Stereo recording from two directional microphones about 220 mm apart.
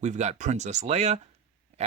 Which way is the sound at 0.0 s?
30° right (ahead or behind).